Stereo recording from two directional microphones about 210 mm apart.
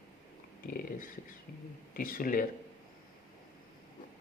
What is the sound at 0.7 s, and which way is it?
Dog, 45° left (ahead or behind).